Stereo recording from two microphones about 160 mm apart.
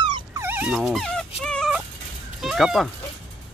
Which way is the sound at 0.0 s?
30° right (ahead or behind).